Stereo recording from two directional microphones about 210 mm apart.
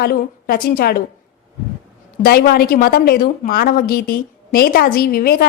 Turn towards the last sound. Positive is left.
turn(degrees=45)  # may be behind; listen again after turning